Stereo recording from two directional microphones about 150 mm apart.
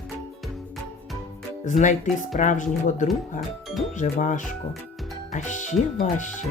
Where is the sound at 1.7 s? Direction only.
55° left (ahead or behind).